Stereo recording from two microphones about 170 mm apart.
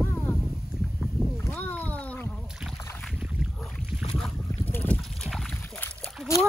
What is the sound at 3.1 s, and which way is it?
Boat, 5° right (ahead or behind).